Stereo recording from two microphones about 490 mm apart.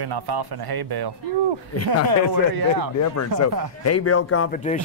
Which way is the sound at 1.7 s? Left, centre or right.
Left.